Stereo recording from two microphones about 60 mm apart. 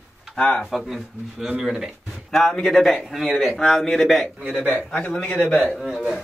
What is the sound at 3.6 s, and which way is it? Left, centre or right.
Speech, centre.